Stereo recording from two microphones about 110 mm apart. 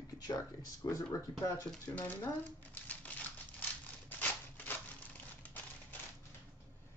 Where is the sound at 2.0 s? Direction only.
15° left (ahead or behind).